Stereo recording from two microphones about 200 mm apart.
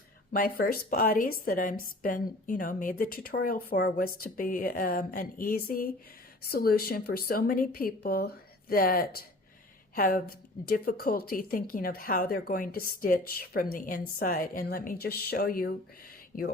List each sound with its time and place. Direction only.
0.3 s a woman's voice: 45° left (ahead or behind)